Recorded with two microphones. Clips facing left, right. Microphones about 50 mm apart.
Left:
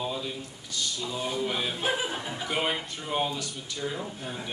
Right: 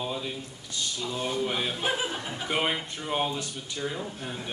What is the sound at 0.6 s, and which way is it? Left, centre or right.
Speech, right.